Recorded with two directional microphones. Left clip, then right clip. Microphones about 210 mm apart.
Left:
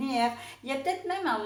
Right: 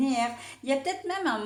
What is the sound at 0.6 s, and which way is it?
Speech, 45° right (ahead or behind).